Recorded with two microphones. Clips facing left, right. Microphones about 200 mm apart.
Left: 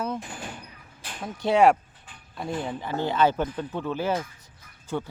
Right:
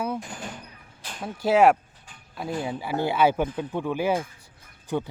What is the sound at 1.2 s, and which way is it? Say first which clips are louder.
Speech: right 1 dB; 5° right (ahead or behind).